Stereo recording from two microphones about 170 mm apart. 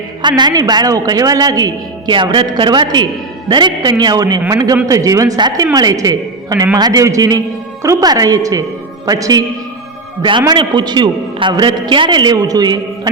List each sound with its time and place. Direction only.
0.2 s a man's voice: 25° right (ahead or behind)